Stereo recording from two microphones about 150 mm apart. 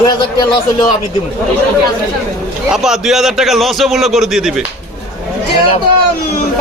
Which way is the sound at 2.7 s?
Centre (ahead or behind).